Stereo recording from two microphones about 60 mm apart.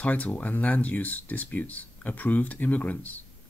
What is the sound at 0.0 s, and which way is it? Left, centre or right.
Speech, left.